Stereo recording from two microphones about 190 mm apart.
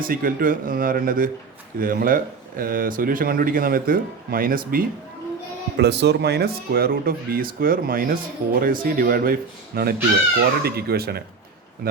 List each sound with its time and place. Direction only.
0.0 s speech: 50° right (ahead or behind)
5.7 s speech: 60° right (ahead or behind)